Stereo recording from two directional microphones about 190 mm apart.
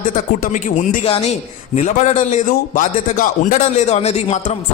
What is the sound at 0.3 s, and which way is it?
A man's voice, 45° left (ahead or behind).